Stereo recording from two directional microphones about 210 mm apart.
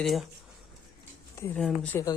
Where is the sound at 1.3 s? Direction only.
10° left (ahead or behind).